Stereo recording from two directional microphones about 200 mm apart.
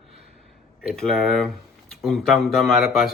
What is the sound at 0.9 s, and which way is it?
Speech, centre (ahead or behind).